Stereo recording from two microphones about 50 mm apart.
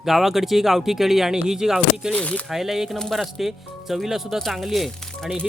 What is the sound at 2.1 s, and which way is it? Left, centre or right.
Speech, left.